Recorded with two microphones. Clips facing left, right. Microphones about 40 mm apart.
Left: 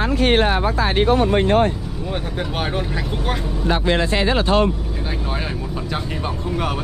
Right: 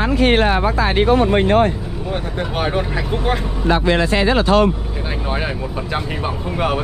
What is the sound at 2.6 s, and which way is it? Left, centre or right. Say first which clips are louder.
Speech: right 5 dB; centre.